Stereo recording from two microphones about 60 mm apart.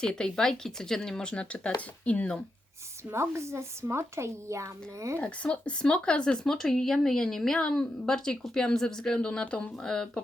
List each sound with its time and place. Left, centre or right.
0.0 s speech: centre
3.1 s speech: right
5.2 s speech: centre